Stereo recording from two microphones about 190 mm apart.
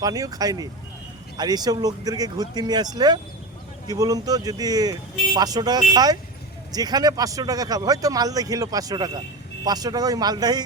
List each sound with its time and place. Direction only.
0.0 s speech: 20° right (ahead or behind)